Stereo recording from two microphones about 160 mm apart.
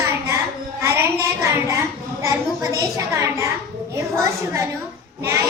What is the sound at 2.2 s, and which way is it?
A child's voice, 20° right (ahead or behind).